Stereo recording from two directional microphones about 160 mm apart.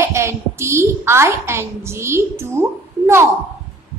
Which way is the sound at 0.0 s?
15° right (ahead or behind).